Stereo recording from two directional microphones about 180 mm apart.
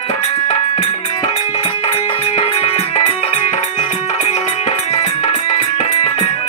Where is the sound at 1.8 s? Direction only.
35° left (ahead or behind).